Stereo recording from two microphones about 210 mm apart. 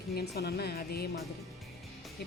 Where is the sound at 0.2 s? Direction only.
50° left (ahead or behind).